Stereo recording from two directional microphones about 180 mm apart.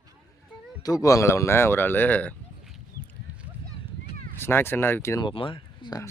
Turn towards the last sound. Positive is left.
turn(degrees=25)  # may be behind; listen again after turning